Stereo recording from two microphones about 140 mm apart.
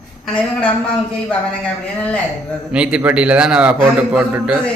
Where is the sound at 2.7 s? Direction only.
10° right (ahead or behind).